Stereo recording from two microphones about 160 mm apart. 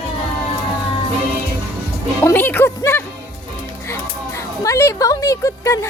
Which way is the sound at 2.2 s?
15° left (ahead or behind).